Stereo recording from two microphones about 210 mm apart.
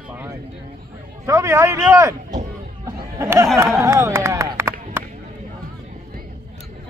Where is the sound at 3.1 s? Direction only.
15° right (ahead or behind).